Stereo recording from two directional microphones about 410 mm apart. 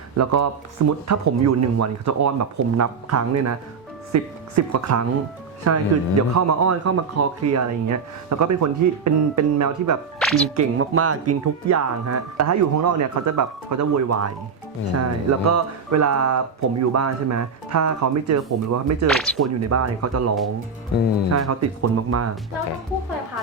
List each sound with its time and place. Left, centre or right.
0.2 s a man's voice: right
10.2 s music: centre
10.5 s a man's voice: right
19.0 s speech: centre
19.4 s a man's voice: right
21.2 s a man's voice: right